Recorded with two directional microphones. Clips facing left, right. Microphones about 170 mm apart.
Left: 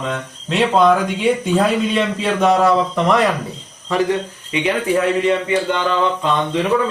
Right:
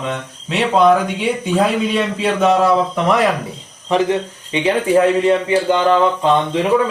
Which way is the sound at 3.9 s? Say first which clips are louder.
Right 2 dB; 20° right (ahead or behind).